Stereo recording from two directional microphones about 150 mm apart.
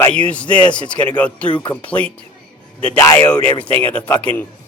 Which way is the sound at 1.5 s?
35° left (ahead or behind).